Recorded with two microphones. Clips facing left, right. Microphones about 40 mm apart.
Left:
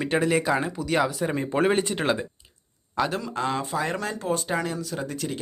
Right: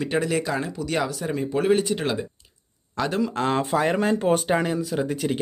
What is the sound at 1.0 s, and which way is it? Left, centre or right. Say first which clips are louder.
Speech: left 1 dB; centre.